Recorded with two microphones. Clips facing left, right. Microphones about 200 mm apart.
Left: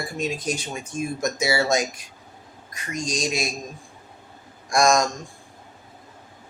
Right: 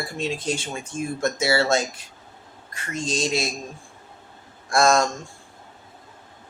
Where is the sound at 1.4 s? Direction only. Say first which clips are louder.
Right 1 dB; 15° left (ahead or behind).